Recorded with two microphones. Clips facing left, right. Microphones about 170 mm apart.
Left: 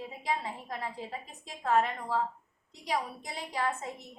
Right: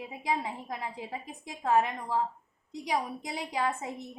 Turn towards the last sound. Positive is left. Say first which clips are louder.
# right 2 dB
turn(degrees=-15)  # may be behind; listen again after turning